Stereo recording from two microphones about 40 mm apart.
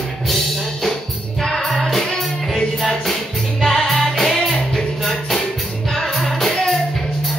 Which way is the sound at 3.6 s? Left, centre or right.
Centre.